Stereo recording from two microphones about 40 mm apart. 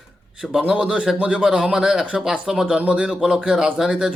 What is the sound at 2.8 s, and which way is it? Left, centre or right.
Speech, right.